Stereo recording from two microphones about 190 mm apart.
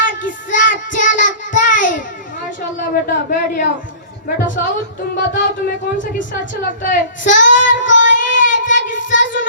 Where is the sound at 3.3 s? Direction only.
45° left (ahead or behind).